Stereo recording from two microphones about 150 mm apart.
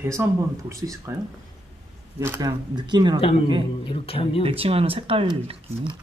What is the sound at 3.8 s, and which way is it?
Speech, 40° left (ahead or behind).